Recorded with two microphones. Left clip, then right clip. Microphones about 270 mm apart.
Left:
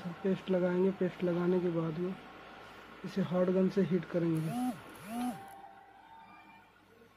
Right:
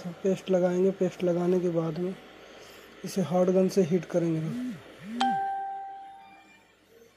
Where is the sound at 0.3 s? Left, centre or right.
Centre.